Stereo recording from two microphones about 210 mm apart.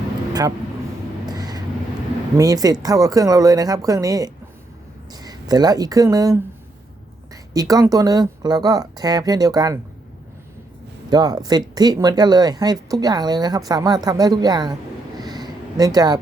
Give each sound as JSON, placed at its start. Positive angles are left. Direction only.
{"t": 1.3, "sound": "vehicle", "side_deg": -20}
{"t": 2.4, "sound": "speech", "side_deg": -15}
{"t": 7.5, "sound": "speech", "side_deg": -15}
{"t": 11.1, "sound": "speech", "side_deg": -20}
{"t": 15.2, "sound": "a sound", "side_deg": -20}